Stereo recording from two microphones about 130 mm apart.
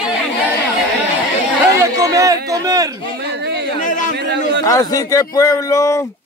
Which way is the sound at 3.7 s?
80° left.